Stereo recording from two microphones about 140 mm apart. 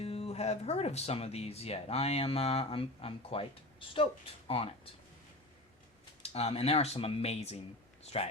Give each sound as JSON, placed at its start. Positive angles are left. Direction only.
{"t": 0.0, "sound": "speech", "side_deg": 45}
{"t": 6.3, "sound": "speech", "side_deg": 45}